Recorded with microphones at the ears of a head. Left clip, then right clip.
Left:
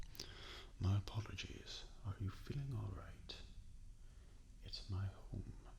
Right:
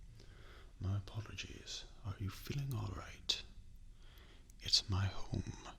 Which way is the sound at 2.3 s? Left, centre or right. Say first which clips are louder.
Right 5 dB; right.